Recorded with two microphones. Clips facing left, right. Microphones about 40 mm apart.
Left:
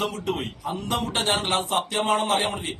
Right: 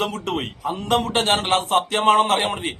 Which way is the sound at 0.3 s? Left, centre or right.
Right.